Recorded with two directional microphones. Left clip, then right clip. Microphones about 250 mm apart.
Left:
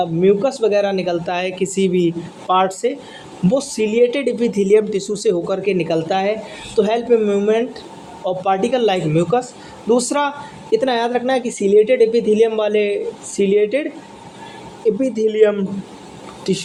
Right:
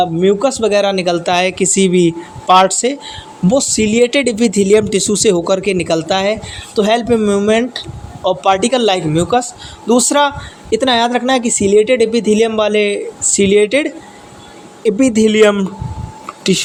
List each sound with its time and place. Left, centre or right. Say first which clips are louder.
0.0 s a man's voice: right 3 dB; right
14.8 s a man's voice: right 5 dB; right